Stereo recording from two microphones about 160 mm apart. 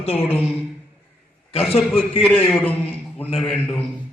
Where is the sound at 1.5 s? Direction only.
35° left (ahead or behind).